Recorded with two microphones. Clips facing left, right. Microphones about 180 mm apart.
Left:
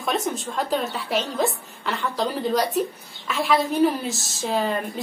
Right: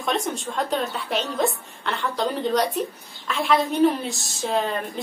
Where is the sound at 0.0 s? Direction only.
Centre (ahead or behind).